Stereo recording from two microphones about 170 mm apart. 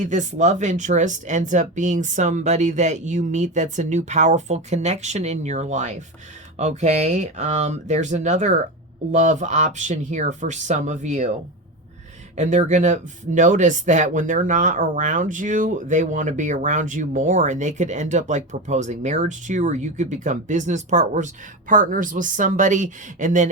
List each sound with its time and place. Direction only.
0.0 s speech: 45° right (ahead or behind)
12.4 s speech: 45° right (ahead or behind)